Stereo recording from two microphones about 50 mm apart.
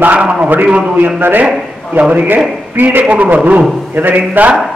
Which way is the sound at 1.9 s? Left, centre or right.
Right.